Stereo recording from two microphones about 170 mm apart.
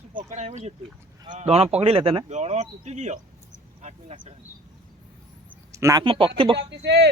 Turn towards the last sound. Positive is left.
turn(degrees=-85)